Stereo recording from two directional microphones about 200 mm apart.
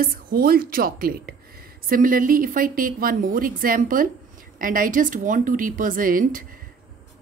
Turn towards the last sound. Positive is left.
turn(degrees=-45)  # may be behind; listen again after turning